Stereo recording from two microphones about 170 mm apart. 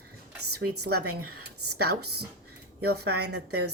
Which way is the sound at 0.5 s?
70° right (ahead or behind).